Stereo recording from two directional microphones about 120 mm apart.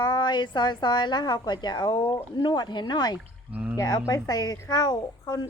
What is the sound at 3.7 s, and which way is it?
A woman's voice, 30° left (ahead or behind).